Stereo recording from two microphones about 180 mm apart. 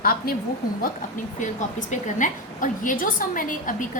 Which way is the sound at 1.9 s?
45° left (ahead or behind).